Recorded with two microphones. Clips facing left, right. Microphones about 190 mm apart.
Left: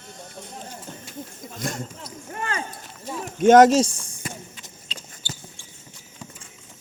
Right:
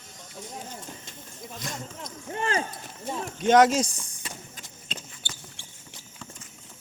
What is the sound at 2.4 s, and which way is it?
Speech, 30° right (ahead or behind).